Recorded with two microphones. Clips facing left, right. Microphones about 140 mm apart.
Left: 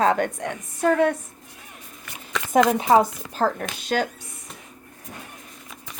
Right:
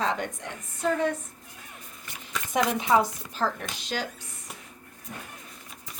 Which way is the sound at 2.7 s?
40° left (ahead or behind).